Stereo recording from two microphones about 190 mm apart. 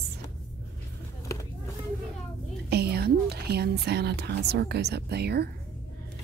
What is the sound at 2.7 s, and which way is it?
Speech, 60° right (ahead or behind).